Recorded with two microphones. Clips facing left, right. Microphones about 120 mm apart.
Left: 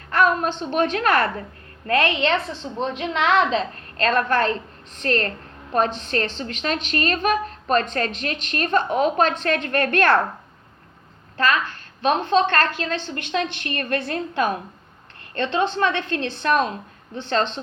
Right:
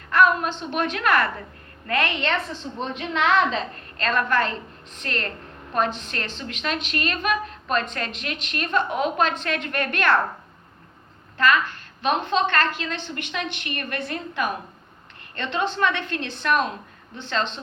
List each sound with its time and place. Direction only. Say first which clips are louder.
0.1 s a sound: even; 35° left (ahead or behind)
0.6 s a woman's voice: left 4 dB; 35° left (ahead or behind)
11.3 s a woman's voice: right 1 dB; 35° left (ahead or behind)